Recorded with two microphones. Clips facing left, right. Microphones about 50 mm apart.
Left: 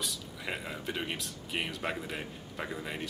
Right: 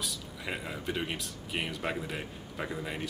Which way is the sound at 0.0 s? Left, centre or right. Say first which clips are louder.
Even; centre.